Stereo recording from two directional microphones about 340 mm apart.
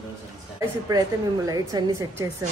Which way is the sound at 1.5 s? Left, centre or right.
Centre.